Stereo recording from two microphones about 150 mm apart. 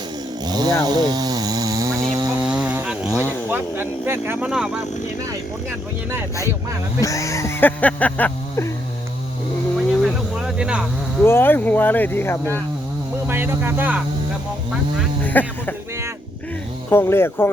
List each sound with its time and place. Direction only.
0.4 s chainsaw: 25° right (ahead or behind)
2.4 s a sound: 10° right (ahead or behind)
3.2 s speech: 15° right (ahead or behind)
7.0 s speech: 20° left (ahead or behind)
10.0 s cricket: 5° right (ahead or behind)
11.2 s speech: 15° left (ahead or behind)
13.2 s speech: 15° right (ahead or behind)
15.2 s speech: 10° left (ahead or behind)
16.9 s speech: 15° left (ahead or behind)